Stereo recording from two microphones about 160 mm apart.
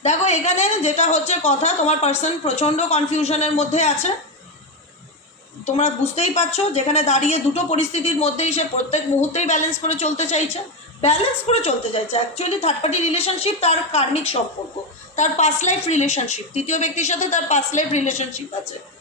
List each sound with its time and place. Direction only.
0.0 s speech: 45° left (ahead or behind)
5.6 s a woman's voice: 45° left (ahead or behind)